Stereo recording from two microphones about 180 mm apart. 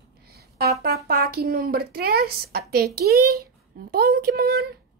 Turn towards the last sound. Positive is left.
turn(degrees=-60)  # may be behind; listen again after turning